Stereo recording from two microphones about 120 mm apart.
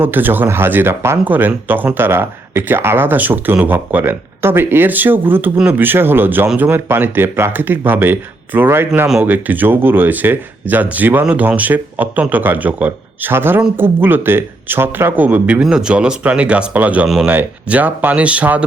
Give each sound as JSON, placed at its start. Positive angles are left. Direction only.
{"t": 0.0, "sound": "speech", "side_deg": -15}